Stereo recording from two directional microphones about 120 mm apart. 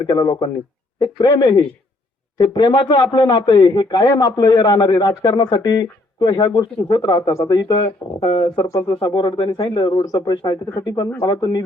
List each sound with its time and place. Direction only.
0.1 s speech: 35° left (ahead or behind)
8.6 s speech: 25° left (ahead or behind)
9.0 s speech: 40° left (ahead or behind)